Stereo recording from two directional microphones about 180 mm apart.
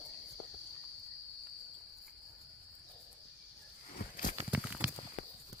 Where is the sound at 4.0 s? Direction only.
50° left (ahead or behind).